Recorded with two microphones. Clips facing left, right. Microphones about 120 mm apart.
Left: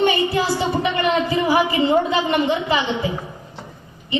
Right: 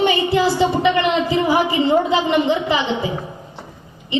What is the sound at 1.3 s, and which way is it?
A woman's voice, 25° right (ahead or behind).